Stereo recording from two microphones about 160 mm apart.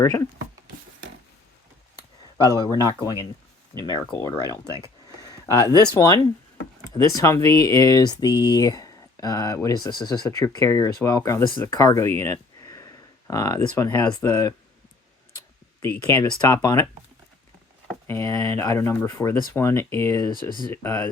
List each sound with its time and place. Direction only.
0.0 s speech: 20° left (ahead or behind)
2.6 s speech: 25° left (ahead or behind)
5.7 s speech: 25° left (ahead or behind)
18.1 s speech: 20° left (ahead or behind)